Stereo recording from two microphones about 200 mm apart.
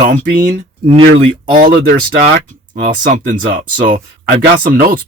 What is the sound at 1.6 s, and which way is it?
Speech, 50° right (ahead or behind).